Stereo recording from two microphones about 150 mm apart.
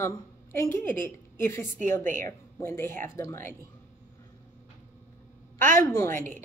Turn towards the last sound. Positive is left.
turn(degrees=15)  # may be behind; listen again after turning